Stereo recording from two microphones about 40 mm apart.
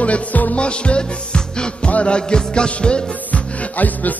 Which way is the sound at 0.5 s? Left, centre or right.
Left.